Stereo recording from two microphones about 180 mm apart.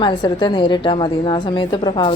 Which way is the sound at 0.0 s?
25° left (ahead or behind).